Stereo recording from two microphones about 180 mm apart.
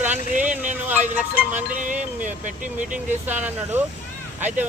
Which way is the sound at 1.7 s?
45° right (ahead or behind).